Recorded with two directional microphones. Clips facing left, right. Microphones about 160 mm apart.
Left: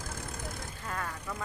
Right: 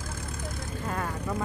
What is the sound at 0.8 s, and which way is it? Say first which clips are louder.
Vehicle: right 6 dB; 25° right (ahead or behind).